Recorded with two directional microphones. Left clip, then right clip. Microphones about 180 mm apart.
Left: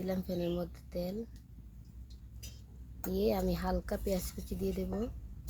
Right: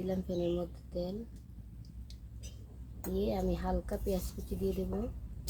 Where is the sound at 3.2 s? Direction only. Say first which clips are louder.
Left 2 dB; 30° left (ahead or behind).